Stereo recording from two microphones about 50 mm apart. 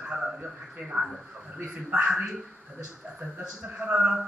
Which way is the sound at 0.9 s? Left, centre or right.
Centre.